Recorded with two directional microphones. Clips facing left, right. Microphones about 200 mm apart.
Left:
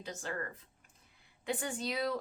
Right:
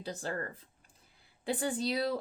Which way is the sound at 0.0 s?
35° right (ahead or behind).